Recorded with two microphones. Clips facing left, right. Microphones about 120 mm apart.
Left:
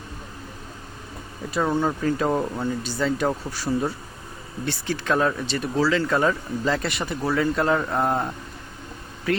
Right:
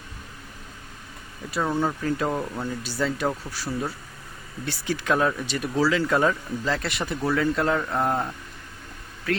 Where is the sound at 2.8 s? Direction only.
5° right (ahead or behind).